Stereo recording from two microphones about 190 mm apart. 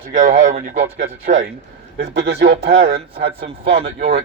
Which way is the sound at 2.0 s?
60° right (ahead or behind).